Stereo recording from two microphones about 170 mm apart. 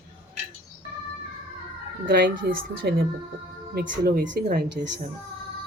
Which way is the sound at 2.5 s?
75° right (ahead or behind).